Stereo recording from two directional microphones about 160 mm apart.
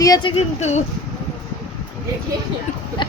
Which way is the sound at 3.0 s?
30° left (ahead or behind).